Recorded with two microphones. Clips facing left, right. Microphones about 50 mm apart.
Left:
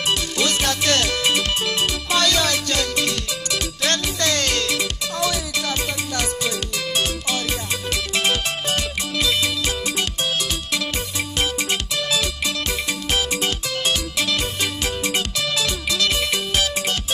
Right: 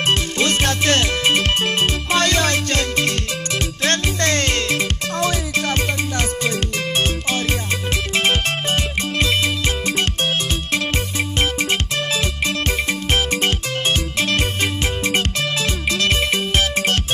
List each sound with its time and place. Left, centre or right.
0.0 s music: right
11.3 s music: right